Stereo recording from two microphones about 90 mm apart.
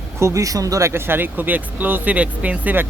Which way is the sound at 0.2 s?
35° right (ahead or behind).